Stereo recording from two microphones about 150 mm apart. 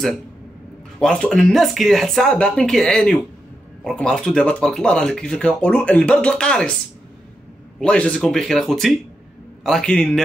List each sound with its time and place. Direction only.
0.9 s speech: 5° left (ahead or behind)
7.8 s speech: 5° left (ahead or behind)